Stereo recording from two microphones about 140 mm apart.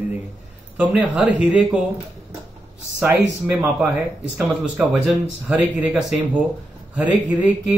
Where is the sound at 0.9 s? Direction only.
10° right (ahead or behind).